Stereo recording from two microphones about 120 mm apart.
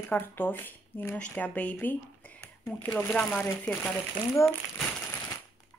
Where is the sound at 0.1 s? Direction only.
15° left (ahead or behind).